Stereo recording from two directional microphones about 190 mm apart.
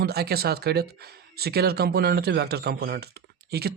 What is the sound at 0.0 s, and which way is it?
Speech, 55° right (ahead or behind).